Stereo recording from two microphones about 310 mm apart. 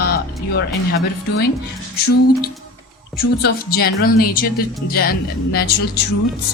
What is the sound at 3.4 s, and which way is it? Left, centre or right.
Speech, left.